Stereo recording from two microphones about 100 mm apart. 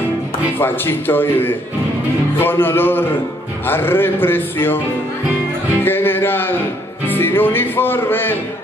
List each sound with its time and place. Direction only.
0.6 s speech: 20° left (ahead or behind)
5.9 s music: 20° left (ahead or behind)